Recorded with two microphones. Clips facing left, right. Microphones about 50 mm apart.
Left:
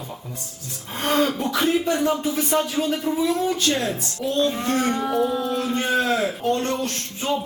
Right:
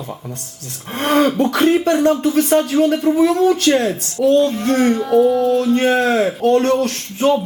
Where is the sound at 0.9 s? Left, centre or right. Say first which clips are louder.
Right 6 dB; right.